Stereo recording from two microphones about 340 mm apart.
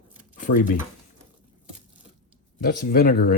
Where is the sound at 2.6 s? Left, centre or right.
Left.